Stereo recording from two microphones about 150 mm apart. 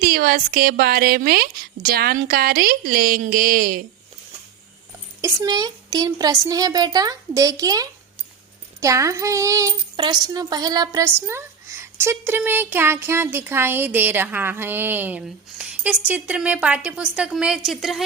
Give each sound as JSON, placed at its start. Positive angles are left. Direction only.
{"t": 0.0, "sound": "a woman's voice", "side_deg": -80}
{"t": 5.2, "sound": "a woman's voice", "side_deg": -25}